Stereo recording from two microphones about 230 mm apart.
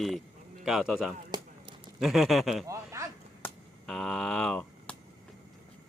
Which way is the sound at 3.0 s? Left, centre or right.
Centre.